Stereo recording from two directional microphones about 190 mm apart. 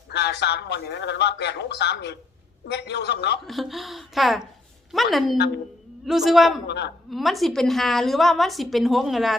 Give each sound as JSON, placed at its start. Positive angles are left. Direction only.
{"t": 0.1, "sound": "speech", "side_deg": 60}
{"t": 3.4, "sound": "a woman's voice", "side_deg": 0}
{"t": 6.7, "sound": "speech", "side_deg": 65}
{"t": 7.1, "sound": "a woman's voice", "side_deg": 0}